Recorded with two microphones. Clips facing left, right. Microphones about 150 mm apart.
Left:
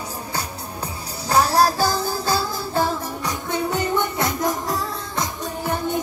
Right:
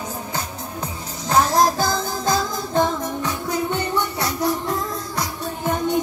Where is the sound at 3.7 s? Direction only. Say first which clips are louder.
Left 1 dB; 45° left (ahead or behind).